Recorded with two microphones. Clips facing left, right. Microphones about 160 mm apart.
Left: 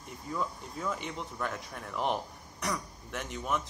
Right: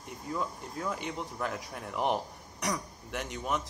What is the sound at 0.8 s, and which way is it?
A man's voice, 5° right (ahead or behind).